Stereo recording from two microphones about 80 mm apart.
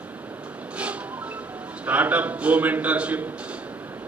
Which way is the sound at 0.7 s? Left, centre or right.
Centre.